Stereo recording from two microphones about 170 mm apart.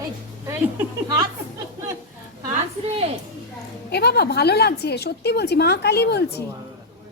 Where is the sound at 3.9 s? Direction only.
70° left (ahead or behind).